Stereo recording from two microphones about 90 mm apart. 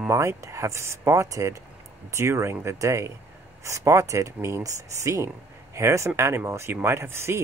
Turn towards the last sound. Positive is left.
turn(degrees=-30)  # may be behind; listen again after turning